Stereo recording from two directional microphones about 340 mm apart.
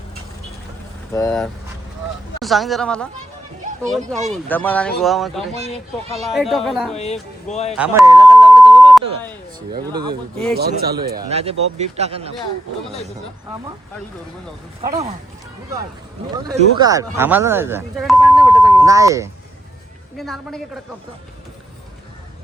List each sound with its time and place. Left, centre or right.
1.1 s speech: centre
5.5 s speech: centre
6.1 s speech: centre
6.9 s speech: centre
7.7 s a sound: centre
9.9 s speech: centre
10.6 s speech: right
16.3 s speech: centre